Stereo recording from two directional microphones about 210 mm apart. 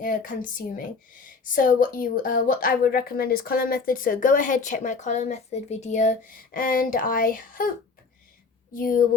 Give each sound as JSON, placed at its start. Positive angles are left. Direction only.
{"t": 0.0, "sound": "a woman's voice", "side_deg": 40}
{"t": 8.7, "sound": "a woman's voice", "side_deg": 40}